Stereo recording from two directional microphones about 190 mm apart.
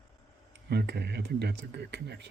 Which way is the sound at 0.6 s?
60° right (ahead or behind).